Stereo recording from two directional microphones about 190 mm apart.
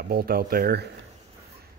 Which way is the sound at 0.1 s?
50° right (ahead or behind).